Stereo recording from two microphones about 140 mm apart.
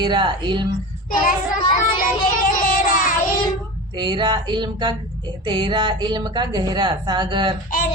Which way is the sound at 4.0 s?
35° right (ahead or behind).